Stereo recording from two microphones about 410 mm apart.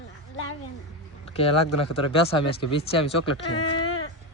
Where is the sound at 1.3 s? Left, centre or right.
Centre.